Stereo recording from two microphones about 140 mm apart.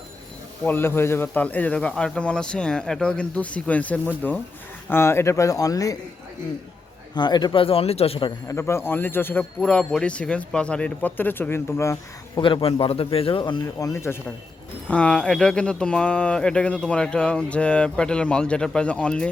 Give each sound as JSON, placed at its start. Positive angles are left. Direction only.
{"t": 0.6, "sound": "speech", "side_deg": 15}
{"t": 7.1, "sound": "speech", "side_deg": 30}
{"t": 8.4, "sound": "speech", "side_deg": 20}
{"t": 12.4, "sound": "speech", "side_deg": 35}
{"t": 14.8, "sound": "speech", "side_deg": 10}